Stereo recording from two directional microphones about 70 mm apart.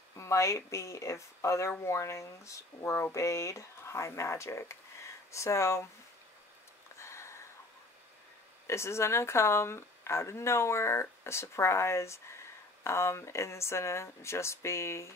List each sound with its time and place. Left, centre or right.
0.1 s speech: left
7.0 s a sound: left
8.6 s speech: left